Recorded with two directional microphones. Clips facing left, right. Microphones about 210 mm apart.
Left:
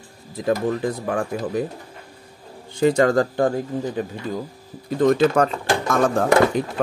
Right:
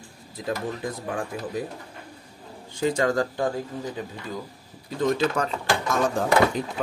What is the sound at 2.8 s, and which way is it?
Speech, 60° left (ahead or behind).